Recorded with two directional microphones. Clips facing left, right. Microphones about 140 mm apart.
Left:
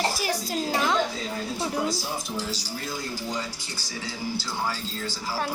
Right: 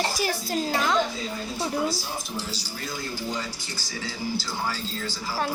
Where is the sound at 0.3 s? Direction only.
15° left (ahead or behind).